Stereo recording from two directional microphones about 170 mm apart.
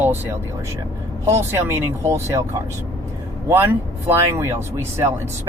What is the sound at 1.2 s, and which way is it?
Speech, 15° right (ahead or behind).